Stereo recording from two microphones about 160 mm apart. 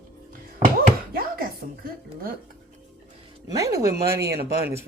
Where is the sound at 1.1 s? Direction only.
65° right (ahead or behind).